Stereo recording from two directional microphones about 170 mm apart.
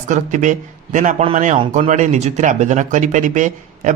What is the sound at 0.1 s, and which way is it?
Speech, 45° right (ahead or behind).